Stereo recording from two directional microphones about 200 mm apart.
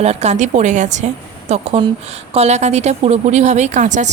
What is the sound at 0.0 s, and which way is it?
Speech, 35° right (ahead or behind).